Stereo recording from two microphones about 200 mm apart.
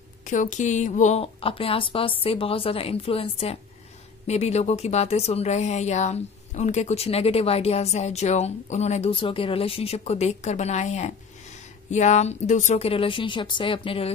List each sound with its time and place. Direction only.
0.3 s a woman's voice: 40° left (ahead or behind)